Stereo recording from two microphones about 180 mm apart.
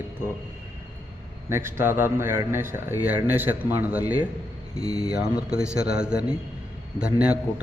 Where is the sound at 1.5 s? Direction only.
15° right (ahead or behind).